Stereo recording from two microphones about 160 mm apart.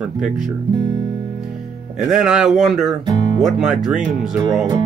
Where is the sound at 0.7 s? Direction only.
25° right (ahead or behind).